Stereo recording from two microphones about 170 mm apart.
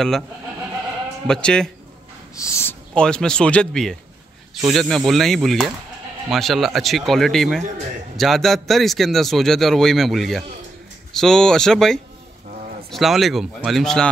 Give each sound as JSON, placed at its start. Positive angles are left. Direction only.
{"t": 1.2, "sound": "a man's voice", "side_deg": 5}
{"t": 2.3, "sound": "a woman's voice", "side_deg": 15}
{"t": 2.9, "sound": "a man's voice", "side_deg": 5}